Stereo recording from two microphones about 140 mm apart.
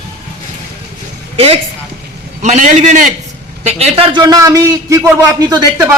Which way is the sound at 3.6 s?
50° right (ahead or behind).